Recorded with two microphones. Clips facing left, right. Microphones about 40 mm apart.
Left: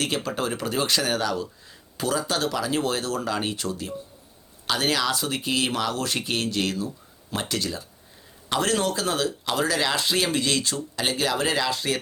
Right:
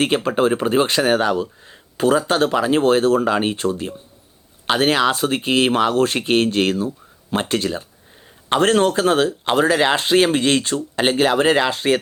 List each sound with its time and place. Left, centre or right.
0.0 s speech: right